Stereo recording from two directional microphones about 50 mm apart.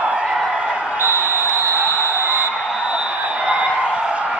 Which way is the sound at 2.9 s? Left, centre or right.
Centre.